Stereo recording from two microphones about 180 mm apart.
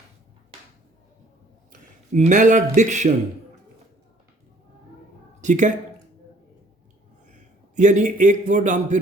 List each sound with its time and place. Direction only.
1.7 s speech: 40° right (ahead or behind)
5.4 s speech: 45° right (ahead or behind)
7.8 s a man's voice: 45° right (ahead or behind)